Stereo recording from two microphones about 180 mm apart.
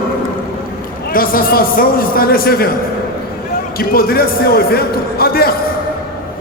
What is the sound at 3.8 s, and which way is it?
A man's voice, 55° left (ahead or behind).